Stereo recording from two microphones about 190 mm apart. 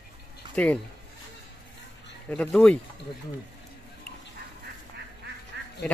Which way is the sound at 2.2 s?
5° left (ahead or behind).